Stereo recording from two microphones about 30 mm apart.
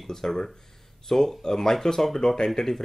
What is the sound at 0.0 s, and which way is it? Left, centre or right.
Speech, centre.